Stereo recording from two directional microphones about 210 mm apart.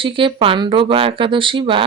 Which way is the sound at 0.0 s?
25° right (ahead or behind).